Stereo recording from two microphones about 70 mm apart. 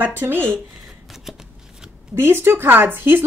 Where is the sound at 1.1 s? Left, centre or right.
Centre.